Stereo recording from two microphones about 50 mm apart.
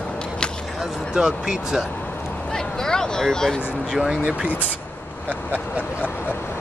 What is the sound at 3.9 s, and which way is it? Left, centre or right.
Speech, centre.